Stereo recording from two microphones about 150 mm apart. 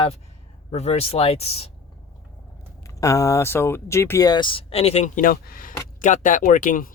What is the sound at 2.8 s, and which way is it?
Speech, 20° left (ahead or behind).